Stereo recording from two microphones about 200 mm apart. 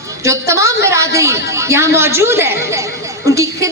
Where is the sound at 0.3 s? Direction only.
15° right (ahead or behind).